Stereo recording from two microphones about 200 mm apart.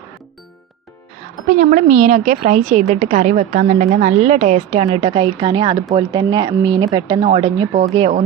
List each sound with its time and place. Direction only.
1.5 s a woman's voice: 40° right (ahead or behind)